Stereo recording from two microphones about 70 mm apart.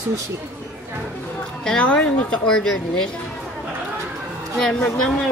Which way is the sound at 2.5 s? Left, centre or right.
Centre.